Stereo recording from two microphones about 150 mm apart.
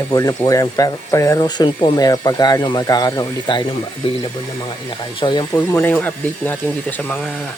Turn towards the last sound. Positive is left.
turn(degrees=5)  # may be behind; listen again after turning